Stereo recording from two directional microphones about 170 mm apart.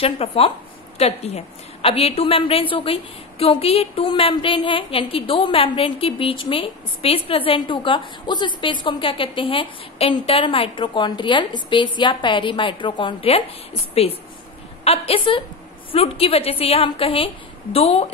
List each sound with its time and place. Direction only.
0.0 s a woman's voice: 35° left (ahead or behind)